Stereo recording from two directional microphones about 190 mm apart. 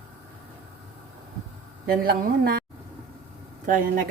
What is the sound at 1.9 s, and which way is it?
Speech, 50° right (ahead or behind).